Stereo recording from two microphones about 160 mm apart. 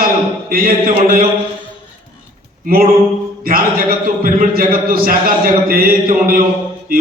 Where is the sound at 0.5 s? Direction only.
65° right (ahead or behind).